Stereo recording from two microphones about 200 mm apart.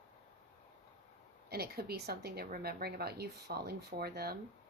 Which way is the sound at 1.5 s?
50° right (ahead or behind).